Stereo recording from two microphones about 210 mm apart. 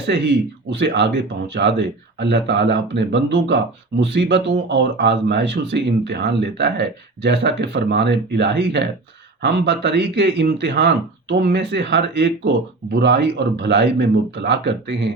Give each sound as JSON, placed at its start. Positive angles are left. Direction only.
{"t": 0.7, "sound": "speech", "side_deg": -55}